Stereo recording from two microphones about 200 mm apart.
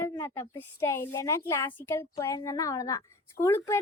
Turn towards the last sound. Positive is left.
turn(degrees=10)  # may be behind; listen again after turning